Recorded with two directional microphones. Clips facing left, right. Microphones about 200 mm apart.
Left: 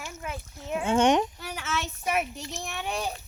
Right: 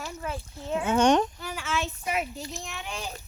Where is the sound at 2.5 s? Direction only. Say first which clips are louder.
Left 4 dB; 65° left (ahead or behind).